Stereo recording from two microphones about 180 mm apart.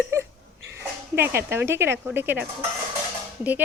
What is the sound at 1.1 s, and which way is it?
Speech, 15° right (ahead or behind).